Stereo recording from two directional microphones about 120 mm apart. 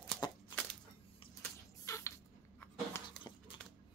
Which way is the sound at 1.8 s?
25° left (ahead or behind).